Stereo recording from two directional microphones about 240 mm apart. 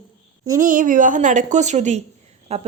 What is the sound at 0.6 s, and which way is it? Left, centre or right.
A woman's voice, right.